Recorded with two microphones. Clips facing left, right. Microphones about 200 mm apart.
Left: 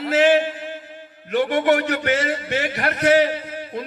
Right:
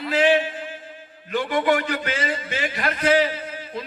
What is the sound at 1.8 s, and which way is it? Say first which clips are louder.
A man's voice: left 5 dB; 70° left (ahead or behind).